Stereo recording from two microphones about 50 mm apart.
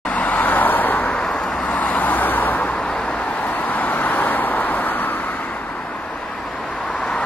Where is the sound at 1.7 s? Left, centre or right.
Left.